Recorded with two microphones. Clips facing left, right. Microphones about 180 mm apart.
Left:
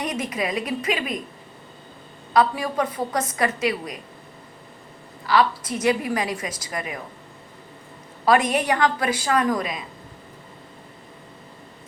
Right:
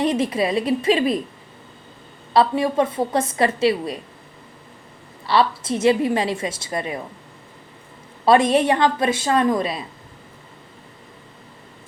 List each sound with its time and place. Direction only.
0.0 s a woman's voice: 30° right (ahead or behind)
2.3 s a woman's voice: 25° right (ahead or behind)
5.3 s a woman's voice: 30° right (ahead or behind)
8.2 s a woman's voice: 25° right (ahead or behind)